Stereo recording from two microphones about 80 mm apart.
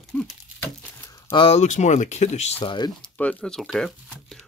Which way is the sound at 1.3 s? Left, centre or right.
Left.